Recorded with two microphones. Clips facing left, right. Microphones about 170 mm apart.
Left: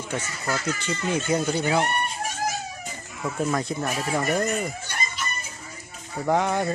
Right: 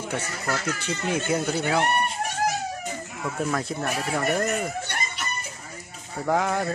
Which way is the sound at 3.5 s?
5° right (ahead or behind).